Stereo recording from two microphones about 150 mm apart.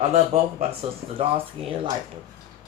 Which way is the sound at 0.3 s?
45° right (ahead or behind).